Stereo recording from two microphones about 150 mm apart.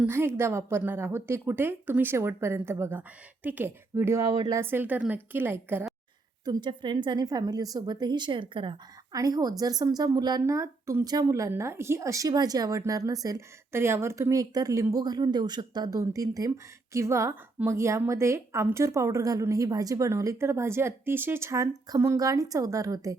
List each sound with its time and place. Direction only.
0.1 s a woman's voice: 15° right (ahead or behind)
6.4 s a woman's voice: 30° right (ahead or behind)